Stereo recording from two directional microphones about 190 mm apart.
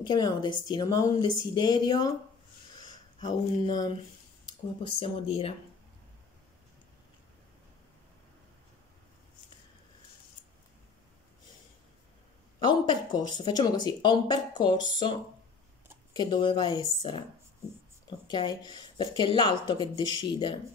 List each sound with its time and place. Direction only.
0.0 s speech: 20° left (ahead or behind)
2.8 s a sound: 20° left (ahead or behind)
3.5 s speech: 25° left (ahead or behind)
12.5 s speech: 20° left (ahead or behind)
18.2 s speech: 25° left (ahead or behind)